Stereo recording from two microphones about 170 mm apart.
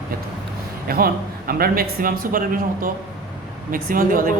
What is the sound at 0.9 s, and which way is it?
A man's voice, 60° right (ahead or behind).